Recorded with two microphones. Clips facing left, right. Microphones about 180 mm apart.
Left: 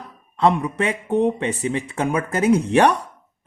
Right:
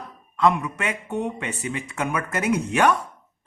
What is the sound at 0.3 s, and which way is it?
Speech, 30° left (ahead or behind).